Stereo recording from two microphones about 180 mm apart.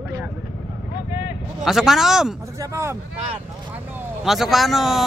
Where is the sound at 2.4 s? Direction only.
15° right (ahead or behind).